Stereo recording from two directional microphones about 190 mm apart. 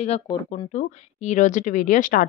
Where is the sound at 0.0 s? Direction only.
35° left (ahead or behind).